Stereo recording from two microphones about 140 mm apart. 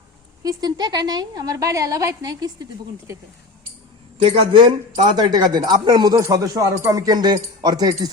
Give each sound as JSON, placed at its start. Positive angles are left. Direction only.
{"t": 0.4, "sound": "speech", "side_deg": -30}
{"t": 4.2, "sound": "speech", "side_deg": -35}